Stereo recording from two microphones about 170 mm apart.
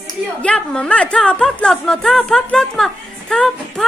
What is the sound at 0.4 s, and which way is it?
A woman's voice, 5° left (ahead or behind).